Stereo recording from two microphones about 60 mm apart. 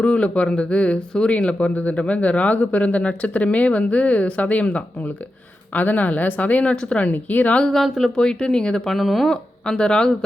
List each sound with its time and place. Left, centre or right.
0.0 s speech: centre
7.6 s speech: centre
9.3 s speech: centre